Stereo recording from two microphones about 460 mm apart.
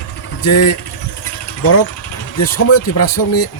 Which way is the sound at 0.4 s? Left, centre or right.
Left.